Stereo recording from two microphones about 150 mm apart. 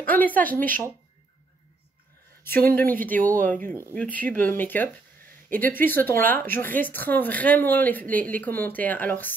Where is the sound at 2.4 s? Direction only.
15° left (ahead or behind).